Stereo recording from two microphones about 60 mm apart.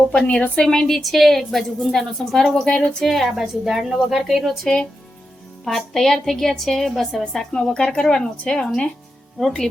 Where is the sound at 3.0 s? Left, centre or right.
Centre.